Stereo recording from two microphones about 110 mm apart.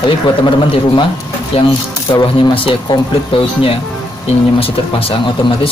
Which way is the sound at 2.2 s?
50° left (ahead or behind).